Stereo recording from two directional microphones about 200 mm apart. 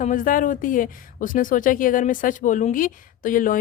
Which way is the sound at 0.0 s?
40° left (ahead or behind).